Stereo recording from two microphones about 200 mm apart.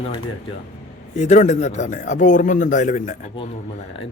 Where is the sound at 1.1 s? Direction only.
35° left (ahead or behind).